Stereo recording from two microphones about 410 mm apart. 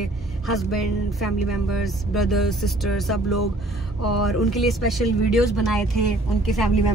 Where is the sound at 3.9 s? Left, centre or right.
Left.